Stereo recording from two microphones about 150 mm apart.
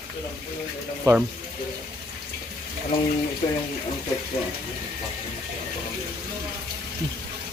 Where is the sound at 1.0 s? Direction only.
10° right (ahead or behind).